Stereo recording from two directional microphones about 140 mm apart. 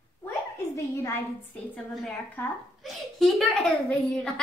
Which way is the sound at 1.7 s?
Centre (ahead or behind).